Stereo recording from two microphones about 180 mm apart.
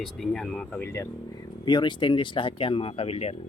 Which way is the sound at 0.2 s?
Centre (ahead or behind).